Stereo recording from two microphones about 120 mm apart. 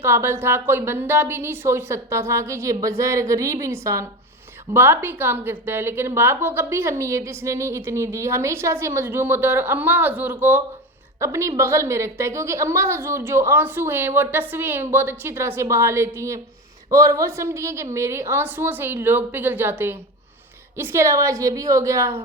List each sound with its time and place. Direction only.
0.0 s a woman's voice: 20° right (ahead or behind)